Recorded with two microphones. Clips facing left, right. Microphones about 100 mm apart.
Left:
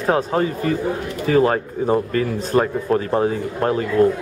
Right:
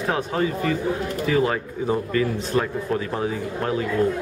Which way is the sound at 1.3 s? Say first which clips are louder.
Left 6 dB; 45° left (ahead or behind).